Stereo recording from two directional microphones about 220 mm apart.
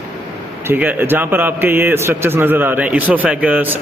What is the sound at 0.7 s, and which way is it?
A man's voice, 10° right (ahead or behind).